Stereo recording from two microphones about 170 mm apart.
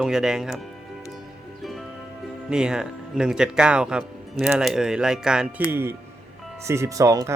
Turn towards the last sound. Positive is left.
turn(degrees=-20)  # may be behind; listen again after turning